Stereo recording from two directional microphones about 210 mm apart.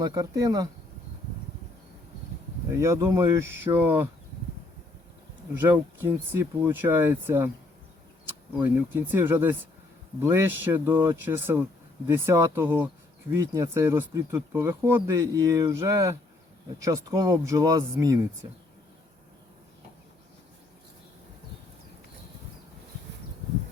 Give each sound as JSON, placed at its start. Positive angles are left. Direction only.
{"t": 0.0, "sound": "speech", "side_deg": -15}
{"t": 2.6, "sound": "speech", "side_deg": -15}
{"t": 5.5, "sound": "speech", "side_deg": -10}